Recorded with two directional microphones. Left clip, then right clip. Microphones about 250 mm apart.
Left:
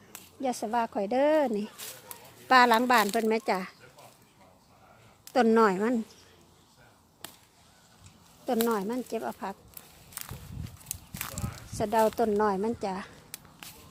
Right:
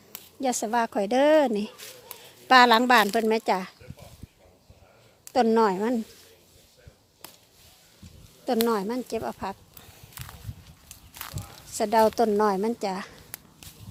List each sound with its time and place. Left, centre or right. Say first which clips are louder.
0.1 s speech: right 4 dB; right
5.3 s speech: right 1 dB; centre
8.6 s speech: right 3 dB; centre
10.2 s walk: even; centre
11.8 s speech: right 4 dB; right